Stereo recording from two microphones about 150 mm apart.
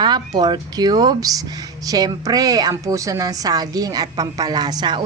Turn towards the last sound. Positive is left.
turn(degrees=-30)  # may be behind; listen again after turning